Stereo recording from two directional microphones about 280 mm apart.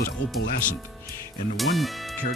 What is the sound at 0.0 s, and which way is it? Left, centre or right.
Speech, left.